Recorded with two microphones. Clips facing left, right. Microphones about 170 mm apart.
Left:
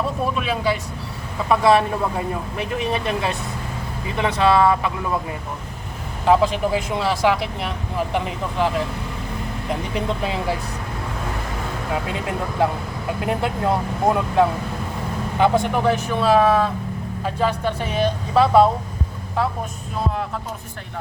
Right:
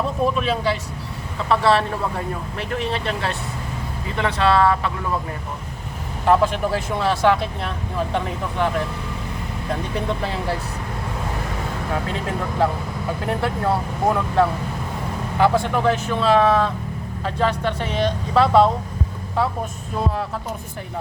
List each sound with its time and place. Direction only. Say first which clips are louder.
0.3 s speech: even; 10° left (ahead or behind)
6.2 s speech: left 1 dB; 15° left (ahead or behind)
9.6 s speech: even; 15° left (ahead or behind)
12.0 s speech: even; 15° left (ahead or behind)